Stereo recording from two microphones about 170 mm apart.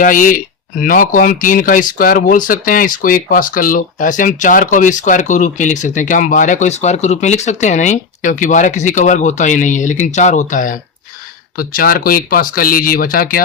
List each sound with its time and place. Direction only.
0.0 s speech: 50° left (ahead or behind)